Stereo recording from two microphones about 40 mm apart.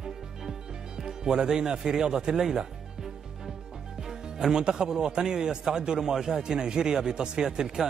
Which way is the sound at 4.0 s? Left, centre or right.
Centre.